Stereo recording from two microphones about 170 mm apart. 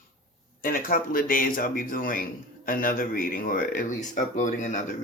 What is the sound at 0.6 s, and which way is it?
Speech, 55° left (ahead or behind).